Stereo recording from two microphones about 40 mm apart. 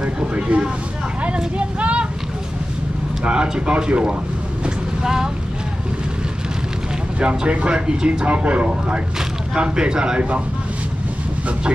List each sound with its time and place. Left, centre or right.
0.0 s speech: right
3.3 s speech: right
4.6 s vehicle: centre
7.2 s speech: right